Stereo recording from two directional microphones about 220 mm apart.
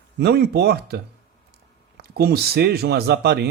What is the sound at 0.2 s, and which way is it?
Speech, 50° right (ahead or behind).